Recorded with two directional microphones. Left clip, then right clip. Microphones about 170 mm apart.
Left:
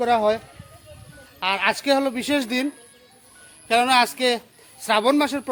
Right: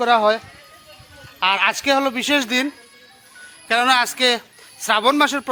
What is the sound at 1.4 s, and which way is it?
A man's voice, 10° right (ahead or behind).